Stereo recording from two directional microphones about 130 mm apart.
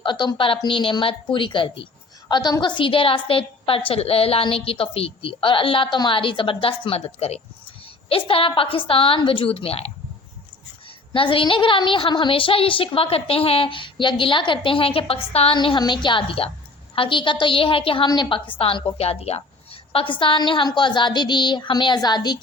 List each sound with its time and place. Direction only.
0.0 s a woman's voice: 35° left (ahead or behind)
15.5 s a woman's voice: 35° left (ahead or behind)